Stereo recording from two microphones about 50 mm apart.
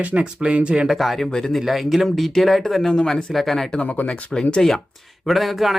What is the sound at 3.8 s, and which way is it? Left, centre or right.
Speech, left.